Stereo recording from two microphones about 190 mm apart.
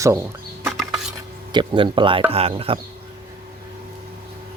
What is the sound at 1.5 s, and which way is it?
Speech, 25° right (ahead or behind).